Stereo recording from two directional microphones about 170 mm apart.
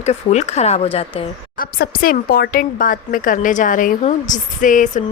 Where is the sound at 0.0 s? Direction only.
40° left (ahead or behind).